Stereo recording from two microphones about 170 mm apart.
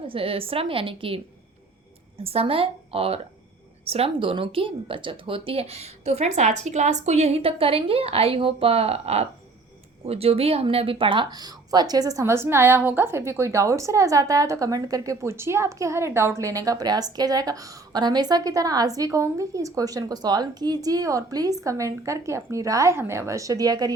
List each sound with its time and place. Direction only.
0.1 s speech: 35° right (ahead or behind)